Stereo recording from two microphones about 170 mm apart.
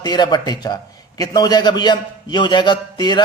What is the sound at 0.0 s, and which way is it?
A man's voice, 25° left (ahead or behind).